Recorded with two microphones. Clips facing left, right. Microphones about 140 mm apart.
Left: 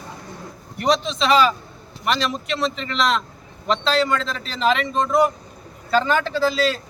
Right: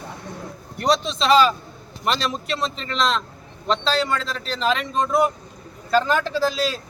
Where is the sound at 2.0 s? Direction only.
35° right (ahead or behind).